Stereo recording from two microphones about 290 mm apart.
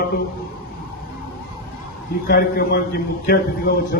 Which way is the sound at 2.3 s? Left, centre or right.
Left.